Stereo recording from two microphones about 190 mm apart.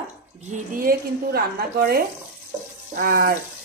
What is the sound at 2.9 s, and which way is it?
Water tap, 50° right (ahead or behind).